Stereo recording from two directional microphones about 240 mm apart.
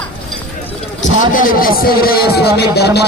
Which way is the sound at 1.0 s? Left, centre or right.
Left.